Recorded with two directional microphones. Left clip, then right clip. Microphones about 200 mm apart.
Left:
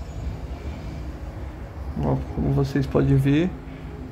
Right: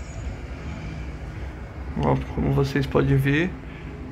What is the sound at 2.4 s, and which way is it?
Speech, 25° left (ahead or behind).